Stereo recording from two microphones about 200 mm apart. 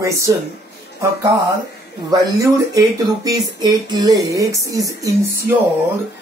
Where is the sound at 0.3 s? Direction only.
15° right (ahead or behind).